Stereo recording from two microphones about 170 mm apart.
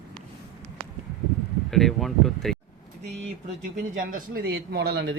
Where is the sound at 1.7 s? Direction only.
Centre (ahead or behind).